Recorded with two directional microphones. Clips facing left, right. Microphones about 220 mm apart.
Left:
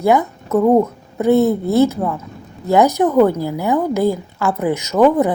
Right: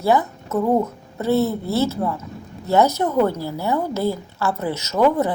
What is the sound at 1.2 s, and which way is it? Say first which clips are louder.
Speech: left 6 dB; 15° left (ahead or behind).